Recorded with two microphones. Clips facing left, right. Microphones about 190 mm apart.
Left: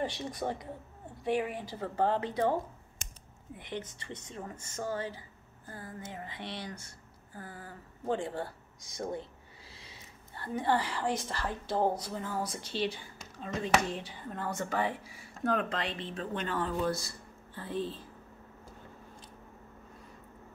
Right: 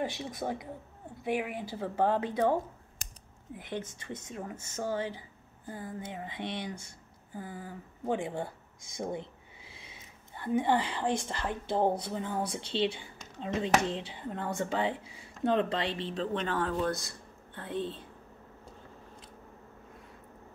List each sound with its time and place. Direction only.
0.2 s speech: 5° right (ahead or behind)
3.5 s speech: centre (ahead or behind); by 9.3 s 20° right (ahead or behind)
10.3 s speech: 15° right (ahead or behind)
16.1 s speech: centre (ahead or behind)